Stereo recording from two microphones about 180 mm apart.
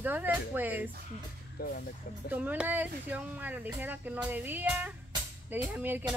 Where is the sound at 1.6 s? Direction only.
55° left (ahead or behind).